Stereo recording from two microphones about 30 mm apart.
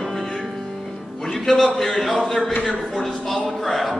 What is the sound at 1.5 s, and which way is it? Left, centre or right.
A man's voice, centre.